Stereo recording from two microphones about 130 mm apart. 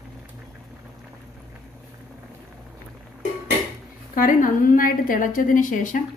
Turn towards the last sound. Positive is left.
turn(degrees=85)